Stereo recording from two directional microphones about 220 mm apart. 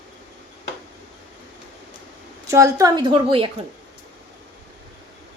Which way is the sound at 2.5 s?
15° right (ahead or behind).